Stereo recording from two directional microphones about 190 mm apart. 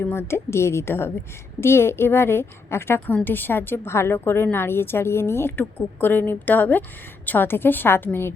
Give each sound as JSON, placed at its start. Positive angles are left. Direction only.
{"t": 0.0, "sound": "a woman's voice", "side_deg": 15}